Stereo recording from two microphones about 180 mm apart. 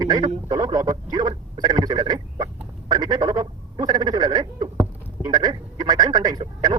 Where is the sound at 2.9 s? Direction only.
25° right (ahead or behind).